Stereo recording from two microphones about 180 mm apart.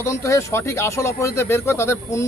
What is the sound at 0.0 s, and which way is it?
Speech, 15° left (ahead or behind).